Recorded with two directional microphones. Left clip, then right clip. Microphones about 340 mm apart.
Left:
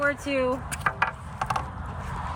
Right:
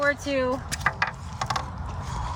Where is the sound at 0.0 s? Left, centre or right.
Centre.